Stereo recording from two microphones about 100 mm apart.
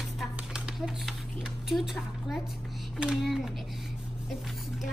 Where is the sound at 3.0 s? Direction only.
5° right (ahead or behind).